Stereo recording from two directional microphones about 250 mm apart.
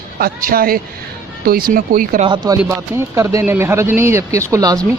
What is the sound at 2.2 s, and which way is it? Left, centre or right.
Speech, centre.